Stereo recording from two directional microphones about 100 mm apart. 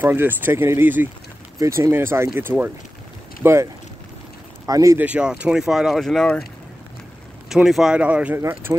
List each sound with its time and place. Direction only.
0.0 s speech: 20° right (ahead or behind)
1.6 s speech: 30° right (ahead or behind)
4.6 s speech: 35° right (ahead or behind)
4.9 s speech: 15° right (ahead or behind); by 6.4 s 5° left (ahead or behind)
7.4 s speech: 5° right (ahead or behind)
8.4 s speech: 25° right (ahead or behind)